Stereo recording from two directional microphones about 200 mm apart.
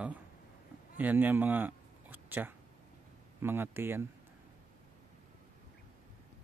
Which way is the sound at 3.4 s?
10° right (ahead or behind).